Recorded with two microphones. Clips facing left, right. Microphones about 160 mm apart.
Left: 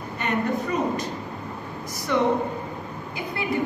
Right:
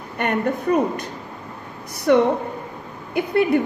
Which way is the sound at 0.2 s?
60° right (ahead or behind).